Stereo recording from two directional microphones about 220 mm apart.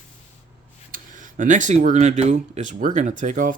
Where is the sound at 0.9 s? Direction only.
35° right (ahead or behind).